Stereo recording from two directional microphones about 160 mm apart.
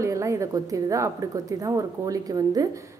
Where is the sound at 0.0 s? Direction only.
20° right (ahead or behind).